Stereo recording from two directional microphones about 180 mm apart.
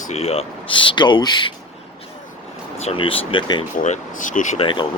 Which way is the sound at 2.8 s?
30° left (ahead or behind).